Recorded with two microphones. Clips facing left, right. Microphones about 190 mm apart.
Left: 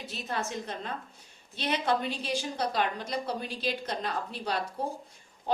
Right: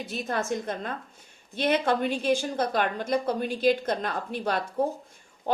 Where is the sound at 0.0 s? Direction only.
50° right (ahead or behind).